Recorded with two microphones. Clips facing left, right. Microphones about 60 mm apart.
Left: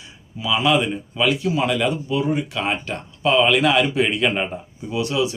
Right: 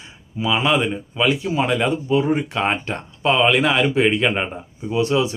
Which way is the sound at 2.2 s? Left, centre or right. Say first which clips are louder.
Right 3 dB; right.